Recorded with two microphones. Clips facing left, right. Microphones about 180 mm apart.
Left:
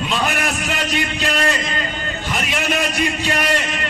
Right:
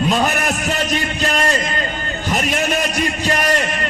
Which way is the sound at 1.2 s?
45° right (ahead or behind).